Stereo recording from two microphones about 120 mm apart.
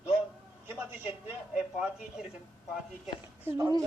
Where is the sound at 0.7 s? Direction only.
15° right (ahead or behind).